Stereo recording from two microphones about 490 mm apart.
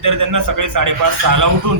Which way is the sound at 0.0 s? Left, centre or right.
Right.